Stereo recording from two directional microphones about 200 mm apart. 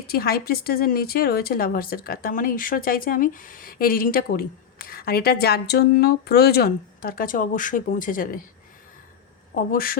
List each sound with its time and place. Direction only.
0.1 s a woman's voice: 50° left (ahead or behind)
9.6 s a woman's voice: 45° left (ahead or behind)